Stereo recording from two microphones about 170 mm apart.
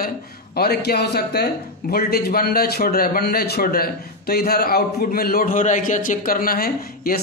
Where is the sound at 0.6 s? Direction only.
65° left (ahead or behind).